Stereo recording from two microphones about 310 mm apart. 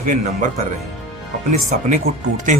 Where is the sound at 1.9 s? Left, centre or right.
Right.